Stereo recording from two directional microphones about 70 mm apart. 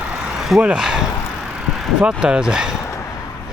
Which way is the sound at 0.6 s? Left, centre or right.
Centre.